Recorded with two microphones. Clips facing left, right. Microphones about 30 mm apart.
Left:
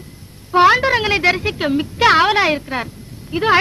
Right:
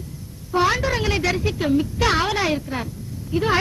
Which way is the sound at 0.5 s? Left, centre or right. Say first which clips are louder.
Left 8 dB; left.